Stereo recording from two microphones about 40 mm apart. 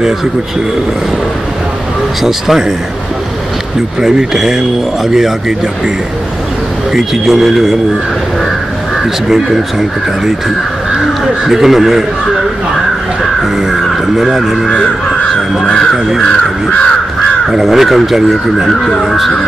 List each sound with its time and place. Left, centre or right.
2.2 s speech: centre
4.0 s speech: centre
6.9 s speech: centre
9.3 s speech: centre
13.2 s speech: centre
15.2 s crow: left
16.2 s speech: centre
17.5 s speech: centre
18.7 s speech: centre